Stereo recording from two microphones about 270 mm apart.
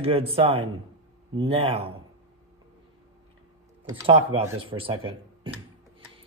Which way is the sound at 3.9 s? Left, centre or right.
Centre.